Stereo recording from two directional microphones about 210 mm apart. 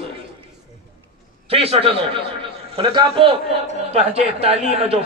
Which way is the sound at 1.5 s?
30° right (ahead or behind).